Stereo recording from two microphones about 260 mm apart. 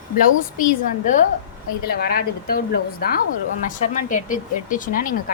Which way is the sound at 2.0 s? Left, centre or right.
Left.